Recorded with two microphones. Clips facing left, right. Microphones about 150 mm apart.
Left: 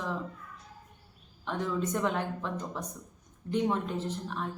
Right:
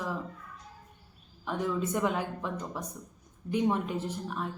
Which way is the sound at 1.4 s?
10° right (ahead or behind).